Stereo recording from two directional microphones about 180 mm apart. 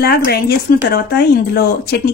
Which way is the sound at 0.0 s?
60° left (ahead or behind).